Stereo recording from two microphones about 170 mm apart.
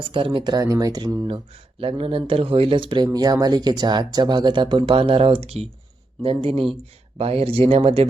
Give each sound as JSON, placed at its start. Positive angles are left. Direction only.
{"t": 0.1, "sound": "speech", "side_deg": -30}